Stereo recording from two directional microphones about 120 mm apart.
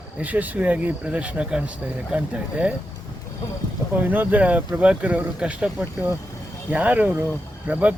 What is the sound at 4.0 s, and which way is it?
Speech, 15° right (ahead or behind).